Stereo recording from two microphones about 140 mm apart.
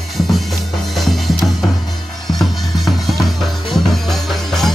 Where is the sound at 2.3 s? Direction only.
Centre (ahead or behind).